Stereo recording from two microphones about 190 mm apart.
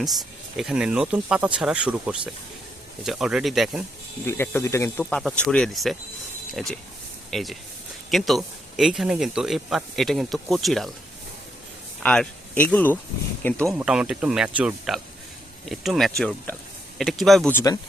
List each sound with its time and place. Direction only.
0.5 s speech: 5° right (ahead or behind)
4.3 s speech: 15° left (ahead or behind)
5.0 s speech: centre (ahead or behind)
12.0 s speech: 5° left (ahead or behind)
13.7 s speech: 5° right (ahead or behind)
17.5 s speech: 15° left (ahead or behind)